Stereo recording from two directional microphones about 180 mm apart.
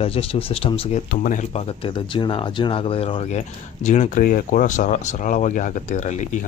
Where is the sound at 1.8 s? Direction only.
30° left (ahead or behind).